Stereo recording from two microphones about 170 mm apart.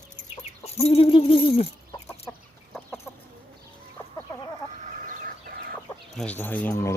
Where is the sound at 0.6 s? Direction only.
40° left (ahead or behind).